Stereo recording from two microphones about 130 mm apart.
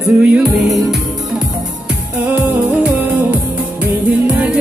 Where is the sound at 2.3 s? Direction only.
10° right (ahead or behind).